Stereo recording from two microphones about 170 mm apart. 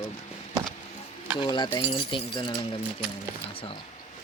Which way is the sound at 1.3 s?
25° left (ahead or behind).